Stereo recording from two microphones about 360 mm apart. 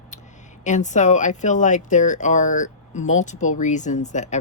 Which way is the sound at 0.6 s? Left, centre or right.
Centre.